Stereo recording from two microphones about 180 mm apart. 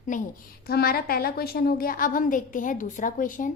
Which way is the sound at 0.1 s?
45° left (ahead or behind).